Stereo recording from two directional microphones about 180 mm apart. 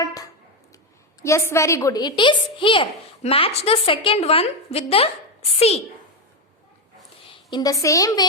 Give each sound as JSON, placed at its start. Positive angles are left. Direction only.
{"t": 0.0, "sound": "a sound", "side_deg": 20}
{"t": 1.2, "sound": "a woman's voice", "side_deg": 15}
{"t": 7.3, "sound": "a woman's voice", "side_deg": 25}